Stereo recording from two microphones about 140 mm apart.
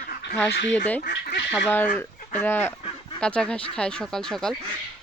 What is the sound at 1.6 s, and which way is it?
Speech, 10° left (ahead or behind).